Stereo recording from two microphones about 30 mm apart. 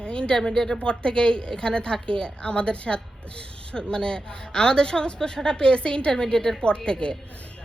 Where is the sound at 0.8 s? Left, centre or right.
Left.